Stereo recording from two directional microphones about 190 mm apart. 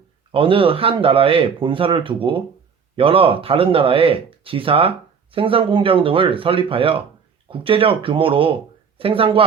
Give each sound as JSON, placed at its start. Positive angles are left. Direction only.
{"t": 0.3, "sound": "speech", "side_deg": -30}